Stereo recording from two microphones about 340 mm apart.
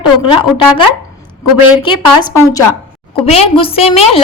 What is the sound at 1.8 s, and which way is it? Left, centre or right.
A woman's voice, centre.